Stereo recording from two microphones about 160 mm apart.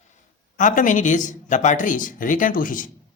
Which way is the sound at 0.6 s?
55° left (ahead or behind).